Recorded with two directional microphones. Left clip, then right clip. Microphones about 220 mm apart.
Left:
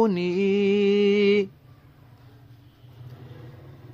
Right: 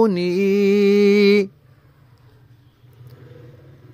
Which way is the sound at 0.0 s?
20° right (ahead or behind).